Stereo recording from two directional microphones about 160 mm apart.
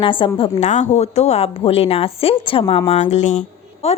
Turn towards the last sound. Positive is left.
turn(degrees=45)  # may be behind; listen again after turning